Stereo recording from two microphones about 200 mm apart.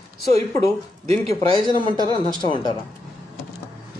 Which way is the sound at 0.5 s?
15° left (ahead or behind).